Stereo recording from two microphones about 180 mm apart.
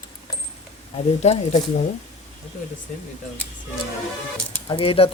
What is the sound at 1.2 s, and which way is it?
Speech, 35° left (ahead or behind).